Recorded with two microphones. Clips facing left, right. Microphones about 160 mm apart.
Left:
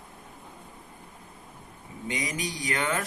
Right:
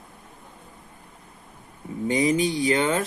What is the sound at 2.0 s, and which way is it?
A man's voice, 30° right (ahead or behind).